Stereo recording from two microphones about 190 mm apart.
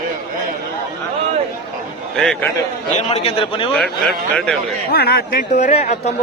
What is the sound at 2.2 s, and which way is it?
Speech, 5° left (ahead or behind).